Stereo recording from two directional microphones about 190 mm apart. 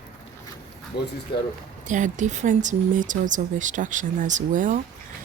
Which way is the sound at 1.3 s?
25° left (ahead or behind).